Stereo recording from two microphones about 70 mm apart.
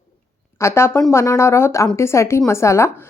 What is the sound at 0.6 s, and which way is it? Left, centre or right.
A woman's voice, left.